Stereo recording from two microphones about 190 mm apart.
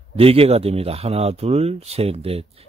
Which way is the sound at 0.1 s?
30° right (ahead or behind).